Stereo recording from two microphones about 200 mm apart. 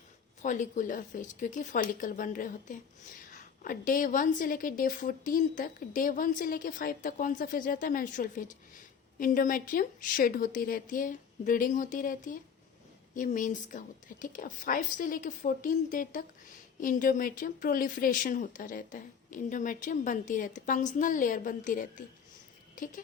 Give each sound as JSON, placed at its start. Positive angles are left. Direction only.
{"t": 0.4, "sound": "a woman's voice", "side_deg": 40}